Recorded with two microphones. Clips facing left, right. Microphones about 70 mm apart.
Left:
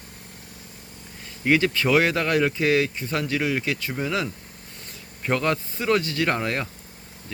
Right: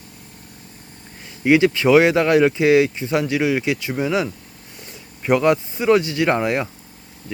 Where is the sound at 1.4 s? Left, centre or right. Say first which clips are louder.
Right 6 dB; centre.